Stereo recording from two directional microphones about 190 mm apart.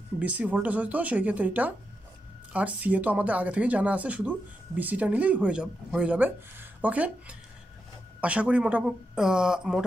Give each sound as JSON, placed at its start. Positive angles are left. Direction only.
{"t": 0.2, "sound": "speech", "side_deg": -5}